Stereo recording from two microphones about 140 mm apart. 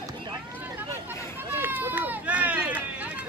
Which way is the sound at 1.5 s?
15° right (ahead or behind).